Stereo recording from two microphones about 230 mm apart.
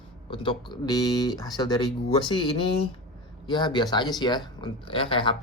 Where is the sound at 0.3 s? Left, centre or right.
Left.